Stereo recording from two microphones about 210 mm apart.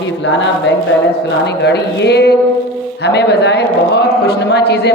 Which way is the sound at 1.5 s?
55° left (ahead or behind).